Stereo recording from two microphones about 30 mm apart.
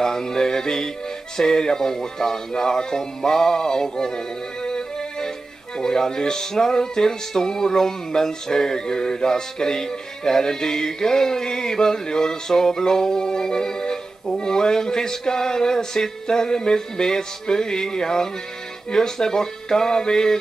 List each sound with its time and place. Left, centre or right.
0.0 s music: centre